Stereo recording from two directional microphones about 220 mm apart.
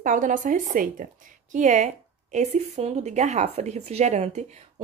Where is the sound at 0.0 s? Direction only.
35° right (ahead or behind).